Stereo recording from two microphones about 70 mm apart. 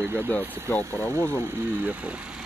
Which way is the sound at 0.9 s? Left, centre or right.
Right.